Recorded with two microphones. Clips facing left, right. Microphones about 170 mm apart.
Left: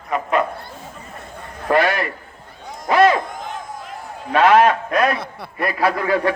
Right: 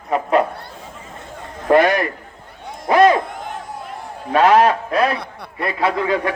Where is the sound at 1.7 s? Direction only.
20° right (ahead or behind).